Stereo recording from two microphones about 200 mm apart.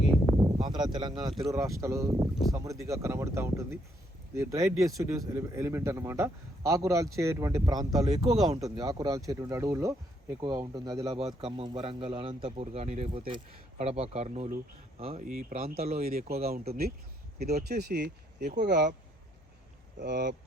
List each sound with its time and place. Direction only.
0.6 s speech: 20° right (ahead or behind)
11.3 s speech: 30° right (ahead or behind)
16.0 s speech: 45° right (ahead or behind)
20.0 s speech: 60° right (ahead or behind)